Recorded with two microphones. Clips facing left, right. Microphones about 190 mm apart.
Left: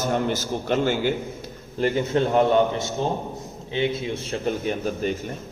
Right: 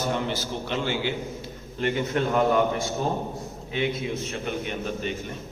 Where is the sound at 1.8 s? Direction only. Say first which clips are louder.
Left 4 dB; 30° left (ahead or behind).